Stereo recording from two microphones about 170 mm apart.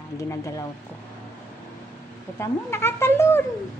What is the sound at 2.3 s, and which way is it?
Speech, 15° left (ahead or behind).